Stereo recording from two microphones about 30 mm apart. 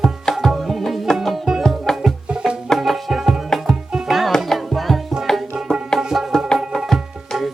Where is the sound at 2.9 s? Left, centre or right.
Centre.